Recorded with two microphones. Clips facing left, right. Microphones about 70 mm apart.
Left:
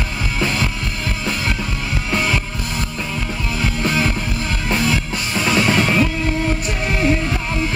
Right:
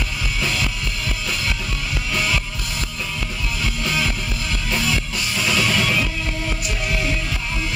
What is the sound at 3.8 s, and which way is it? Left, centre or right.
Music, left.